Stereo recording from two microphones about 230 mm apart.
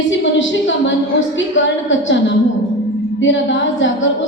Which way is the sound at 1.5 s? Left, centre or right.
Left.